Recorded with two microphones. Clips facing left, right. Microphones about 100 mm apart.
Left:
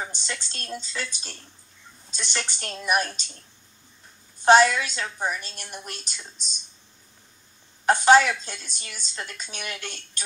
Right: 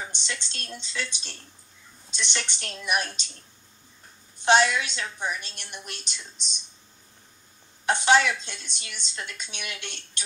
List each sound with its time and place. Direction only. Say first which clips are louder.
0.0 s a woman's voice: left 2 dB; 40° left (ahead or behind)
4.4 s a woman's voice: left 4 dB; 45° left (ahead or behind)
7.8 s a woman's voice: left 4 dB; 45° left (ahead or behind)